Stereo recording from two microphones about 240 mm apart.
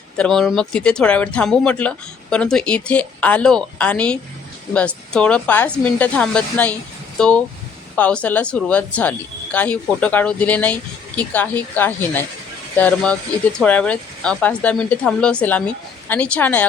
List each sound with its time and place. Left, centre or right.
0.2 s a woman's voice: centre